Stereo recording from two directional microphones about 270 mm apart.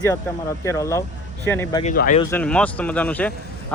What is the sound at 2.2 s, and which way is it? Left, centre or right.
Speech, centre.